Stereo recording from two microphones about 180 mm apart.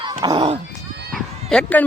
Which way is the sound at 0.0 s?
25° right (ahead or behind).